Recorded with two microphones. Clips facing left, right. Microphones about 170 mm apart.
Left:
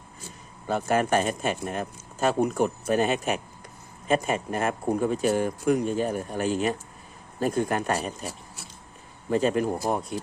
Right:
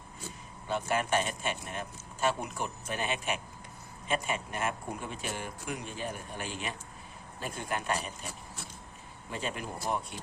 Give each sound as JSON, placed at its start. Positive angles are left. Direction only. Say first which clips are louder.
{"t": 0.7, "sound": "speech", "louder": "left 7 dB", "side_deg": 45}
{"t": 9.3, "sound": "speech", "louder": "left 14 dB", "side_deg": 40}